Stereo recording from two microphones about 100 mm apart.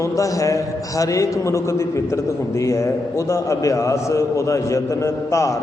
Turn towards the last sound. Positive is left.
turn(degrees=30)  # may be behind; listen again after turning